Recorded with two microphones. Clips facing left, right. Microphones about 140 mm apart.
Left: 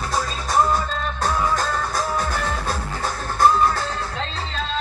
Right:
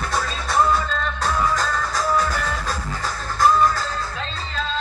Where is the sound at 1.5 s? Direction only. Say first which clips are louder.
Even; 50° left (ahead or behind).